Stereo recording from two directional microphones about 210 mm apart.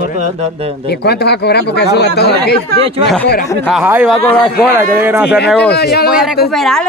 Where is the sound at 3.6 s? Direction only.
5° right (ahead or behind).